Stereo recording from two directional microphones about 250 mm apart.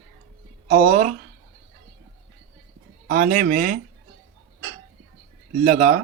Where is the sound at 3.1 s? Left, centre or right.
Right.